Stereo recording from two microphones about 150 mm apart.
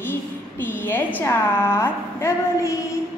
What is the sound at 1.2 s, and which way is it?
A woman's voice, 15° left (ahead or behind).